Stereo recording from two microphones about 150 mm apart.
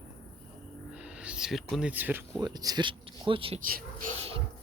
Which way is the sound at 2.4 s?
25° right (ahead or behind).